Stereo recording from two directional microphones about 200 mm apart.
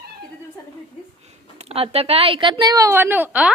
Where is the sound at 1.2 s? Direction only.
30° right (ahead or behind).